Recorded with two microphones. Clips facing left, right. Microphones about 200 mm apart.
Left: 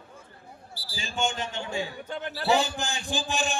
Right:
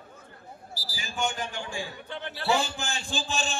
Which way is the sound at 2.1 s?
40° left (ahead or behind).